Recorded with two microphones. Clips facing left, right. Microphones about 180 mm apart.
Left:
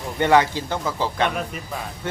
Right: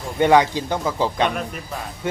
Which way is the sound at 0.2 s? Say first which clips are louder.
Right 2 dB; 15° right (ahead or behind).